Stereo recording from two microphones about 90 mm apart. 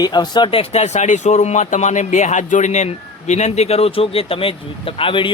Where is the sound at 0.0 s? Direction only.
50° left (ahead or behind); by 0.7 s 75° left (ahead or behind).